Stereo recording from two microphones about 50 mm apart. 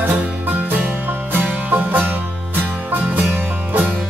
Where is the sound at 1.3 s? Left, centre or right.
Right.